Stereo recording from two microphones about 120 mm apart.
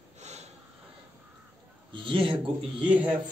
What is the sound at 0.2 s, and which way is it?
Snort, 65° right (ahead or behind).